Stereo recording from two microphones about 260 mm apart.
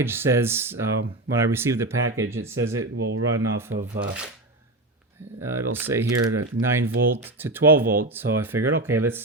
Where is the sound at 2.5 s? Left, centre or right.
Right.